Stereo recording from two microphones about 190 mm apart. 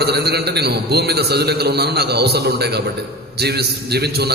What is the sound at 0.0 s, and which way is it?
A man's voice, 55° right (ahead or behind).